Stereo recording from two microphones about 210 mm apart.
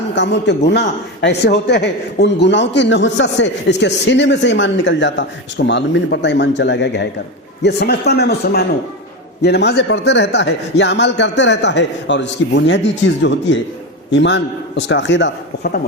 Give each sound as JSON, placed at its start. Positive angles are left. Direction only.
{"t": 0.2, "sound": "a man's voice", "side_deg": 55}